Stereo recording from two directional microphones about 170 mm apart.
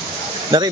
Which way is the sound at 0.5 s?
25° right (ahead or behind).